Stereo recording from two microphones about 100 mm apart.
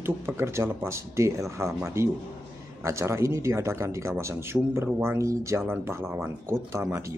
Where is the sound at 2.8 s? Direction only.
30° right (ahead or behind).